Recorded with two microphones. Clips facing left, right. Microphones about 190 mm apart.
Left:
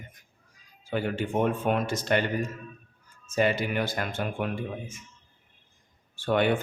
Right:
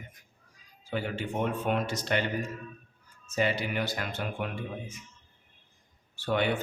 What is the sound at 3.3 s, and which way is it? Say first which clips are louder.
Speech: left 4 dB; 50° left (ahead or behind).